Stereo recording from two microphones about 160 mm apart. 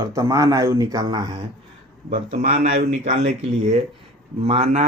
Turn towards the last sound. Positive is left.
turn(degrees=-45)  # may be behind; listen again after turning